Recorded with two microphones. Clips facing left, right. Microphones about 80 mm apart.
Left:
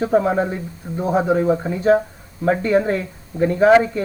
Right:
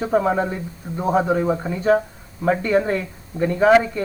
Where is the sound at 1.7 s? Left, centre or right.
Centre.